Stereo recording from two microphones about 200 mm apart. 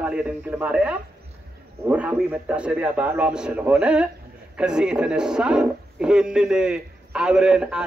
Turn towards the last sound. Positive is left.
turn(degrees=-5)  # may be behind; listen again after turning